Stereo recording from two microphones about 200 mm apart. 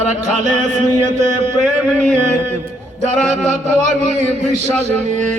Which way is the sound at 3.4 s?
35° right (ahead or behind).